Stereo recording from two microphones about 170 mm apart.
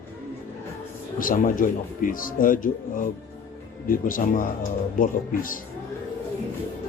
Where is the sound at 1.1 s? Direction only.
55° left (ahead or behind).